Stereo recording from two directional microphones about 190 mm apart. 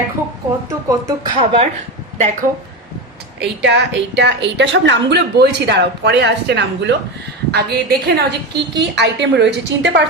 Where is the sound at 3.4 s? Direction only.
65° right (ahead or behind).